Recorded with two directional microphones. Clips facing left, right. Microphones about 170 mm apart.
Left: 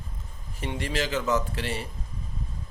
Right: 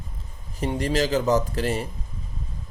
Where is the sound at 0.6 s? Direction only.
40° right (ahead or behind).